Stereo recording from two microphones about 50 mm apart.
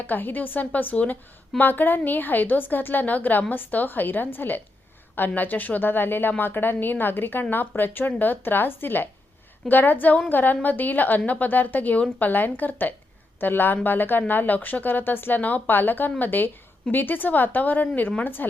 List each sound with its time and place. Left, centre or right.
0.1 s a woman's voice: left
15.4 s a woman's voice: left